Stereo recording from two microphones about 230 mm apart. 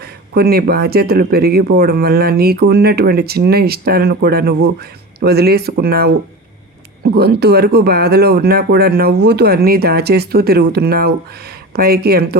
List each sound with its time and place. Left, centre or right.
0.0 s speech: right